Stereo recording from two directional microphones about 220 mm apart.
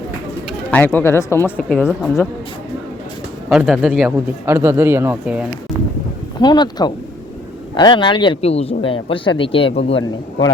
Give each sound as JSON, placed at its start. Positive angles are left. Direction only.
{"t": 0.7, "sound": "speech", "side_deg": 5}
{"t": 3.5, "sound": "speech", "side_deg": -5}
{"t": 6.4, "sound": "speech", "side_deg": 20}